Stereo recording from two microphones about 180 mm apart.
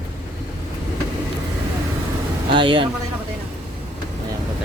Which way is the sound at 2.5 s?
30° right (ahead or behind).